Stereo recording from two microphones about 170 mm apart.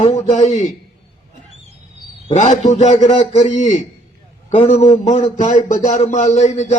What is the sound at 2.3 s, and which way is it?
A man's voice, 45° left (ahead or behind).